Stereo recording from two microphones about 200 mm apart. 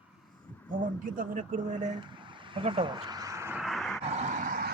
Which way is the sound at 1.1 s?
40° right (ahead or behind).